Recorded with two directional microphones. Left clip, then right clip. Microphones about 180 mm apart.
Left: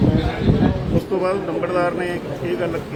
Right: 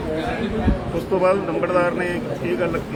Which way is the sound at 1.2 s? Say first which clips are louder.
Right 5 dB; centre (ahead or behind).